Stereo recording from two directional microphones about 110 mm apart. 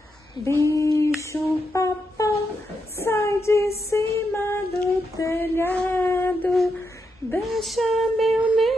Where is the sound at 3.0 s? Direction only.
25° left (ahead or behind).